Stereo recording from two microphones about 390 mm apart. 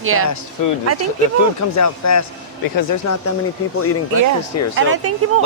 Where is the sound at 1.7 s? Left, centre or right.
Left.